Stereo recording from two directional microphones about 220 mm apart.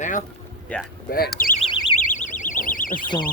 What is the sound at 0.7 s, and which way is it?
Speech, 5° left (ahead or behind).